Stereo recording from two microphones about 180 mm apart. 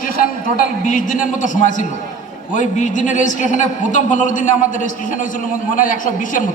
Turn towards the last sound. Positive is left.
turn(degrees=45)  # may be behind; listen again after turning